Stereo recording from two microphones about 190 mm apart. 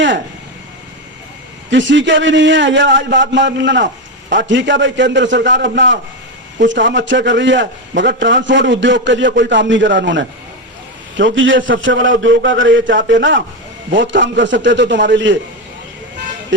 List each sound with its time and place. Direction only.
1.7 s a man's voice: 75° right (ahead or behind)
16.5 s a man's voice: 70° right (ahead or behind)